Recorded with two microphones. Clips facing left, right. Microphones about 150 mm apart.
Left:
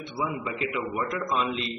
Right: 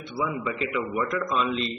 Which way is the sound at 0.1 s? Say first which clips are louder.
Right 3 dB; 20° left (ahead or behind).